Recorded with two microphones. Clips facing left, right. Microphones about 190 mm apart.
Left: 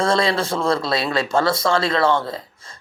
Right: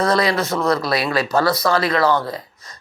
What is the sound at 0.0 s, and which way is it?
Speech, 25° left (ahead or behind).